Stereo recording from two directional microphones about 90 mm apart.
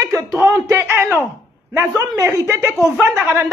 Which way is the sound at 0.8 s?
25° right (ahead or behind).